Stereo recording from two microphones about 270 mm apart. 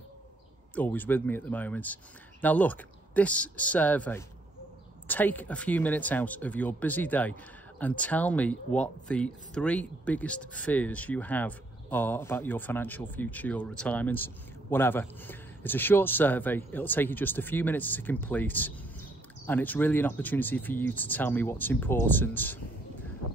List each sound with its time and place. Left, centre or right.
0.7 s speech: centre